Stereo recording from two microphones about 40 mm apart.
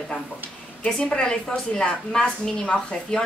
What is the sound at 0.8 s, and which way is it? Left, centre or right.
A woman's voice, left.